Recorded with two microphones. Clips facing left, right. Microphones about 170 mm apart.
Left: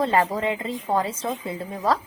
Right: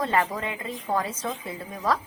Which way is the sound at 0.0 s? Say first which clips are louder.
Left 4 dB; 30° left (ahead or behind).